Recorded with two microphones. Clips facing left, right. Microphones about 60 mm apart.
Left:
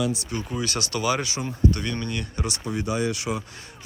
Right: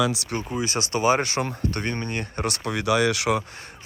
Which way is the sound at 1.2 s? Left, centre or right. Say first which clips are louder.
Even; right.